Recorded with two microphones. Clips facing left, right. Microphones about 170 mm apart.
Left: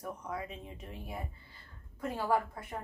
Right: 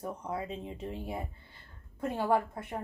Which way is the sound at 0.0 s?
30° right (ahead or behind).